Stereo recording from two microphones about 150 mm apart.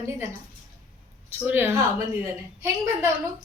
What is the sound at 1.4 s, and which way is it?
A woman's voice, 15° right (ahead or behind).